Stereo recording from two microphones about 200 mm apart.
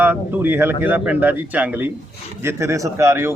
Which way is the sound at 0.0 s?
10° right (ahead or behind).